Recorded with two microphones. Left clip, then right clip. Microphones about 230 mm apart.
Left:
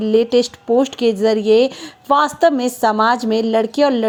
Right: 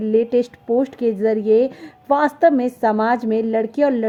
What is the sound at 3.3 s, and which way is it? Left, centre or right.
Speech, left.